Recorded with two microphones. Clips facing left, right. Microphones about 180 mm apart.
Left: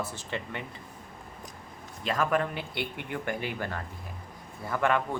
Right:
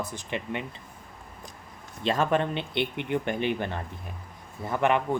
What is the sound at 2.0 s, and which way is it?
Speech, 30° right (ahead or behind).